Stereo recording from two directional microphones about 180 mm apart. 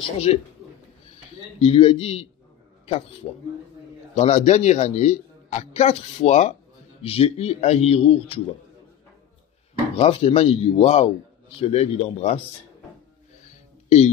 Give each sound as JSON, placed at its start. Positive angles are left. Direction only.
{"t": 0.3, "sound": "a man's voice", "side_deg": 35}
{"t": 1.6, "sound": "a man's voice", "side_deg": 30}
{"t": 3.2, "sound": "a man's voice", "side_deg": 30}
{"t": 9.9, "sound": "a man's voice", "side_deg": 35}
{"t": 13.8, "sound": "speech", "side_deg": 35}